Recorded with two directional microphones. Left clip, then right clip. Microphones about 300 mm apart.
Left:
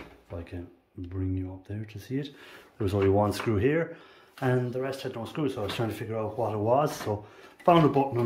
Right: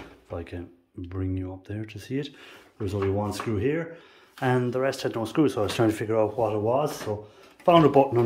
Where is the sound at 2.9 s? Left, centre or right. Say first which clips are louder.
Left 3 dB; centre.